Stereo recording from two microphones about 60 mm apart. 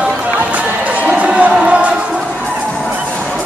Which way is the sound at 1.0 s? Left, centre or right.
Right.